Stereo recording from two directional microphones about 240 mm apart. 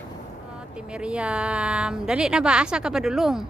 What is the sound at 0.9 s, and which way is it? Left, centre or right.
A woman's voice, centre.